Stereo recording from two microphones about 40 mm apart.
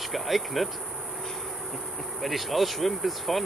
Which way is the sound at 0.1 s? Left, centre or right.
Centre.